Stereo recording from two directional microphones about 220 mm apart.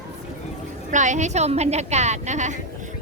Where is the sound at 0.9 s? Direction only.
35° right (ahead or behind).